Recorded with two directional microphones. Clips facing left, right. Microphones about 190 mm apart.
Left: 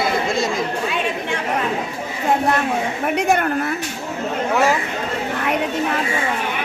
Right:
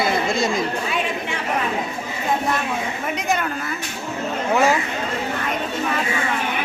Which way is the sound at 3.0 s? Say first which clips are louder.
Left 6 dB; 60° left (ahead or behind).